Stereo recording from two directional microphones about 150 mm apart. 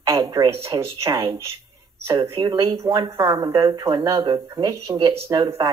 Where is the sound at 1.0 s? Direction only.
30° right (ahead or behind).